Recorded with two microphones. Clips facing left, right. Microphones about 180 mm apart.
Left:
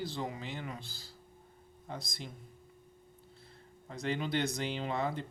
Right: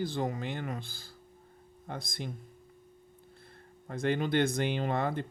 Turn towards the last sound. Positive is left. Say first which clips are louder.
# right 4 dB
turn(degrees=-55)  # may be behind; listen again after turning